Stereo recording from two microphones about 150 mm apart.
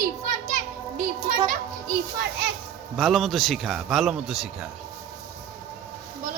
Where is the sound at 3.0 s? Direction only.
Centre (ahead or behind).